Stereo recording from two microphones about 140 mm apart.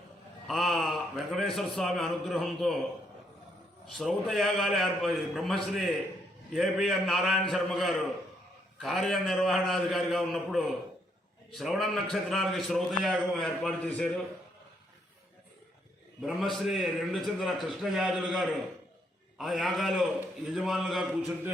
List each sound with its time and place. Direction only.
0.4 s a man's voice: centre (ahead or behind)
3.9 s a man's voice: centre (ahead or behind)
16.2 s a man's voice: centre (ahead or behind)